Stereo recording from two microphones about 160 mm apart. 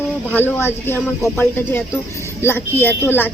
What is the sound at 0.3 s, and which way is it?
Speech, 15° left (ahead or behind).